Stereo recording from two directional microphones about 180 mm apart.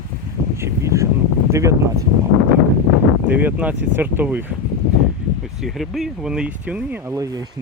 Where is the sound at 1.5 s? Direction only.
15° right (ahead or behind).